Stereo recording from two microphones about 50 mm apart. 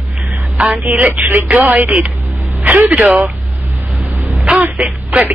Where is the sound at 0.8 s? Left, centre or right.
Right.